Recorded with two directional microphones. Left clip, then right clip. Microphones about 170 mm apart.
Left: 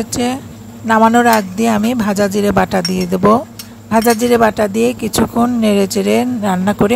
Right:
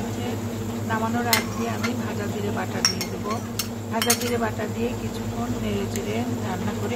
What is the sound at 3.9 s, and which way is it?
A woman's voice, 60° left (ahead or behind).